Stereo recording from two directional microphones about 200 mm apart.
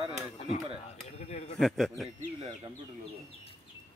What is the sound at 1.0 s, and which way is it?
Speech, 30° left (ahead or behind).